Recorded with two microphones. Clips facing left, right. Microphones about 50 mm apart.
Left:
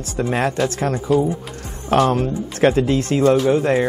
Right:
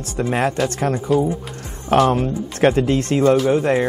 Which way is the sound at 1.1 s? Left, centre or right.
Centre.